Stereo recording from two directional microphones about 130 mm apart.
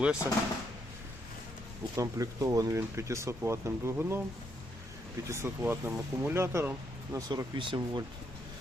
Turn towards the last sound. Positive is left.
turn(degrees=-40)  # may be behind; listen again after turning